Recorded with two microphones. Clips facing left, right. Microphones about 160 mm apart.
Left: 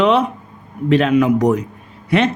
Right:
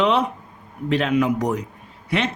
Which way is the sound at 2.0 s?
50° left (ahead or behind).